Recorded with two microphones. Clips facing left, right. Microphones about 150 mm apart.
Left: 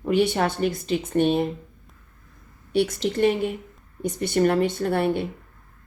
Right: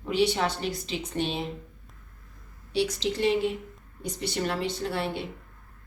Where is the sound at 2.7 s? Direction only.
50° left (ahead or behind).